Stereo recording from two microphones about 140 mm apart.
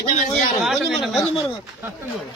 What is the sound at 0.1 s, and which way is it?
Speech, 65° left (ahead or behind).